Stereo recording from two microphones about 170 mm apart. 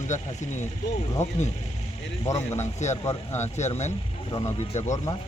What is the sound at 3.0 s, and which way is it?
Speech, 20° left (ahead or behind).